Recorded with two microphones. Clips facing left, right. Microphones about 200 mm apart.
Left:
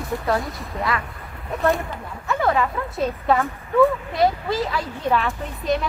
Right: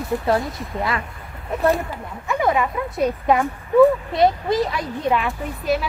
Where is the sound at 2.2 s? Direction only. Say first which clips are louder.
Right 1 dB; 15° right (ahead or behind).